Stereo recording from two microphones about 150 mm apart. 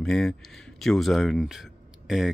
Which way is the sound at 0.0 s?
5° left (ahead or behind).